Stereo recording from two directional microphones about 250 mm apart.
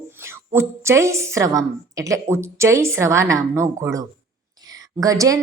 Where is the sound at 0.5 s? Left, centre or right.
Centre.